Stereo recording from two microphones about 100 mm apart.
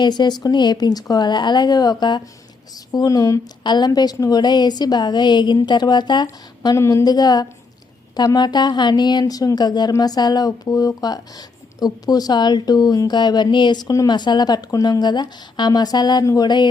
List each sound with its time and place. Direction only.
0.0 s a woman's voice: 45° left (ahead or behind)
3.6 s a woman's voice: 45° left (ahead or behind)
6.7 s a woman's voice: 30° left (ahead or behind)